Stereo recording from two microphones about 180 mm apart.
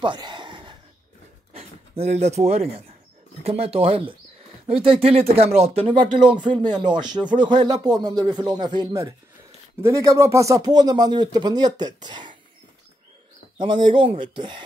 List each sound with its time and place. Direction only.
0.0 s a sound: 25° right (ahead or behind)
1.5 s speech: 35° right (ahead or behind)
13.6 s speech: 25° right (ahead or behind)